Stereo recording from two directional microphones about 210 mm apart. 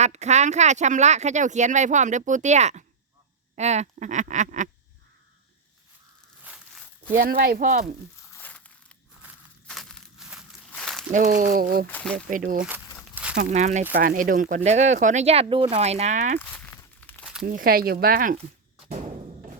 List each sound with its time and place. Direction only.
0.0 s speech: 35° right (ahead or behind)
7.2 s speech: 45° right (ahead or behind)
8.3 s crumpling: 10° left (ahead or behind)
9.6 s a sound: centre (ahead or behind)
11.1 s speech: 35° right (ahead or behind)
11.9 s speech: 5° left (ahead or behind)
12.3 s speech: 40° right (ahead or behind)
12.5 s speech: 5° right (ahead or behind)
13.3 s speech: 35° right (ahead or behind)
16.4 s a sound: 10° left (ahead or behind)
17.4 s speech: 45° right (ahead or behind)